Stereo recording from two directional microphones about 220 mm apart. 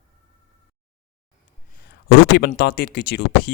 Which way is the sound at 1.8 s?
50° left (ahead or behind).